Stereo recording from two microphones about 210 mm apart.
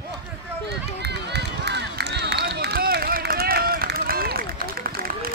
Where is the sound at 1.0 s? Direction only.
55° right (ahead or behind).